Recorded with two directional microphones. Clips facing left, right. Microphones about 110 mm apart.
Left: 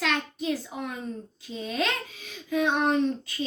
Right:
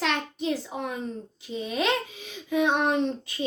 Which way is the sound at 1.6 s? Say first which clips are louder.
Right 3 dB; 15° right (ahead or behind).